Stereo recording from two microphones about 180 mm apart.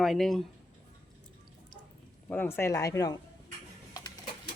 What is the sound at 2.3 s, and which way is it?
Speech, 10° left (ahead or behind).